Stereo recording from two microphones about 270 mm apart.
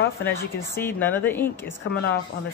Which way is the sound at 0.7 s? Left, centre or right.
Centre.